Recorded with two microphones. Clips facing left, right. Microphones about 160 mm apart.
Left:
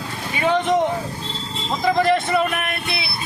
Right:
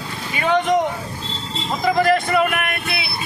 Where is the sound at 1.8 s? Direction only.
Centre (ahead or behind).